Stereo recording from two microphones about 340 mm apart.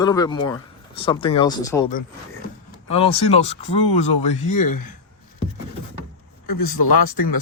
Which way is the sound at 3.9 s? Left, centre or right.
Left.